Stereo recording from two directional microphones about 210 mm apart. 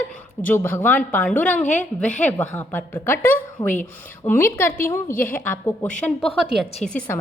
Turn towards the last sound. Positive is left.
turn(degrees=5)  # may be behind; listen again after turning